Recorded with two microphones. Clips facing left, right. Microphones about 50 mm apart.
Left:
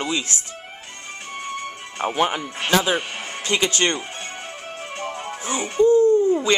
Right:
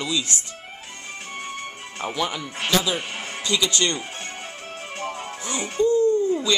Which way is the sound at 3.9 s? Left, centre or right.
Centre.